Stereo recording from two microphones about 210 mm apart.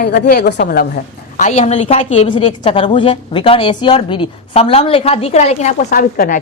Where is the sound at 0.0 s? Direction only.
50° left (ahead or behind).